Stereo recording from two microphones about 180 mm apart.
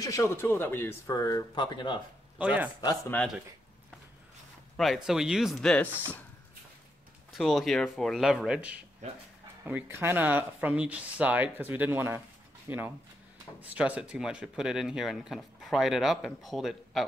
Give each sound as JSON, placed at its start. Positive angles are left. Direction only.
{"t": 0.0, "sound": "speech", "side_deg": 15}
{"t": 2.3, "sound": "speech", "side_deg": -5}
{"t": 4.7, "sound": "speech", "side_deg": 0}
{"t": 7.3, "sound": "speech", "side_deg": 0}